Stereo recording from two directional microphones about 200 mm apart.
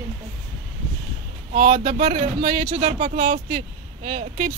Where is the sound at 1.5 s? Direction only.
35° right (ahead or behind).